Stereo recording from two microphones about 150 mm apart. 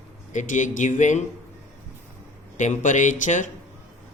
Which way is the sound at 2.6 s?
55° left (ahead or behind).